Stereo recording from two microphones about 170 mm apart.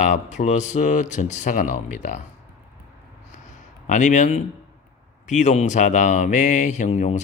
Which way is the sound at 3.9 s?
45° left (ahead or behind).